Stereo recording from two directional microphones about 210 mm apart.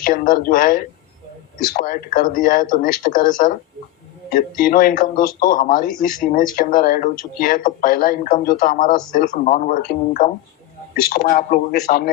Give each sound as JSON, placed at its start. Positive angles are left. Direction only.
{"t": 0.0, "sound": "a man's voice", "side_deg": 40}